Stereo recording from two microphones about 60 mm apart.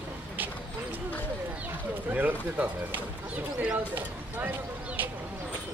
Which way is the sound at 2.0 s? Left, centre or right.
Right.